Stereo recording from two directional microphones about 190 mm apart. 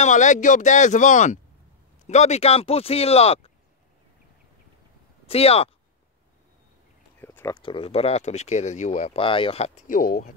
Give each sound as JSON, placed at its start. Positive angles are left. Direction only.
{"t": 0.0, "sound": "speech", "side_deg": 40}
{"t": 5.2, "sound": "speech", "side_deg": 30}
{"t": 7.2, "sound": "a sound", "side_deg": 10}
{"t": 7.6, "sound": "speech", "side_deg": 30}